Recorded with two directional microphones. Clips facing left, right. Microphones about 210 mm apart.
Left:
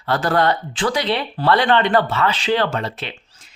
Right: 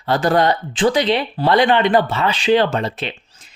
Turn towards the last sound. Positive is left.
turn(degrees=-20)  # may be behind; listen again after turning